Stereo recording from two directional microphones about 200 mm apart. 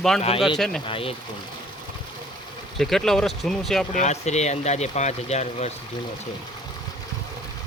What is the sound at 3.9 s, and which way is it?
Speech, 35° left (ahead or behind).